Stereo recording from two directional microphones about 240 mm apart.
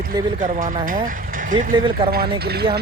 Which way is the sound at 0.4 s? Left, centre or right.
Right.